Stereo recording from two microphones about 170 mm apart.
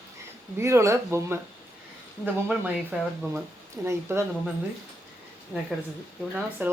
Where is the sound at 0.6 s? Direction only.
15° right (ahead or behind).